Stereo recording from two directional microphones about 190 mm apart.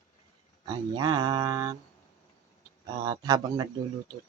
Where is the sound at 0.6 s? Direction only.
20° right (ahead or behind).